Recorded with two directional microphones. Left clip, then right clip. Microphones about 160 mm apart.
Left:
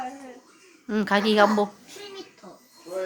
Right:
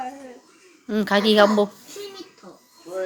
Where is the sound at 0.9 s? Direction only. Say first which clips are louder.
Right 3 dB; 5° right (ahead or behind).